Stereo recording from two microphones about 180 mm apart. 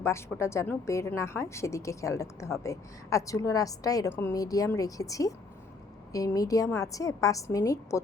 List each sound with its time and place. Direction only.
0.0 s a woman's voice: 15° left (ahead or behind)